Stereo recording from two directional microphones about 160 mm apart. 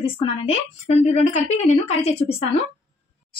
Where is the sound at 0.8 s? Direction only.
45° left (ahead or behind).